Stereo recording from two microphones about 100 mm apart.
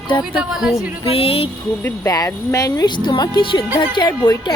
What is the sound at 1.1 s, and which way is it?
Speech, 75° left (ahead or behind).